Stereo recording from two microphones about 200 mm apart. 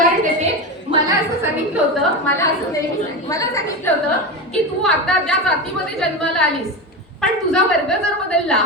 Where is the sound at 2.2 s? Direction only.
10° left (ahead or behind).